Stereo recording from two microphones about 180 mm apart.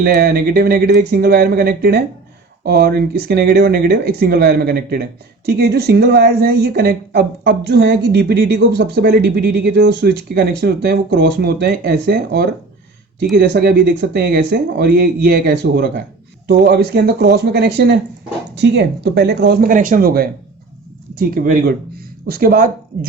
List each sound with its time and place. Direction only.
0.0 s speech: 60° right (ahead or behind)
19.7 s speech: 50° right (ahead or behind)